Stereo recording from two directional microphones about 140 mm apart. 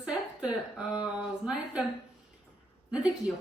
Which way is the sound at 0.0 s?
10° right (ahead or behind).